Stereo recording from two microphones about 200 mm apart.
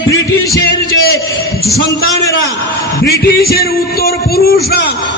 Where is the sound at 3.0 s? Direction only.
50° left (ahead or behind).